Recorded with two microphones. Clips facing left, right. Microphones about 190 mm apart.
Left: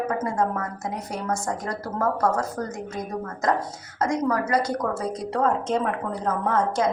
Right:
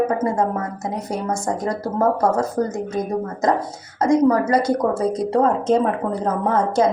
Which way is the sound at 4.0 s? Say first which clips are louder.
Right 8 dB; 25° right (ahead or behind).